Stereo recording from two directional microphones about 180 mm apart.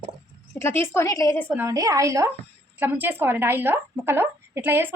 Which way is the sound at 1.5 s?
15° right (ahead or behind).